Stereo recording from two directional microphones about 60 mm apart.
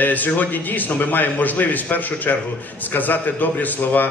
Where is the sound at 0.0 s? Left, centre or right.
Left.